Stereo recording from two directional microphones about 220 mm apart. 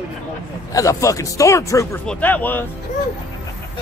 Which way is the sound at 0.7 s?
15° left (ahead or behind).